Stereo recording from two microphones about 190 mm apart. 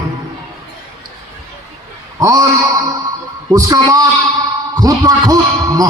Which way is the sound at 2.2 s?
15° right (ahead or behind).